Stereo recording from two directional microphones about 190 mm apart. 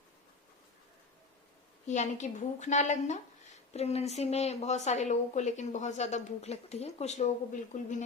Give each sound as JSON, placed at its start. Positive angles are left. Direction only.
{"t": 1.9, "sound": "a woman's voice", "side_deg": 40}